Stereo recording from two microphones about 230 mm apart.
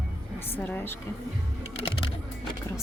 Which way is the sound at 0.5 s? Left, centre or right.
Centre.